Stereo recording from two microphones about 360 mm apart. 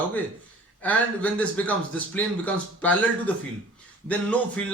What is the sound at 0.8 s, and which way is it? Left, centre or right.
Speech, centre.